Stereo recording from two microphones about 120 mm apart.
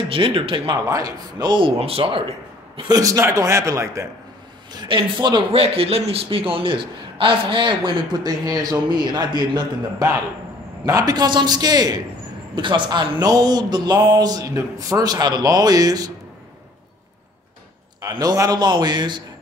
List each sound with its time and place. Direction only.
0.1 s a man's voice: 45° right (ahead or behind)
0.8 s a man's voice: 30° right (ahead or behind)
1.8 s a man's voice: 55° right (ahead or behind)
2.9 s a man's voice: 30° right (ahead or behind)
4.7 s a man's voice: 40° right (ahead or behind)
5.5 s a man's voice: 55° right (ahead or behind); by 16.1 s 30° right (ahead or behind)
18.2 s a man's voice: 30° right (ahead or behind)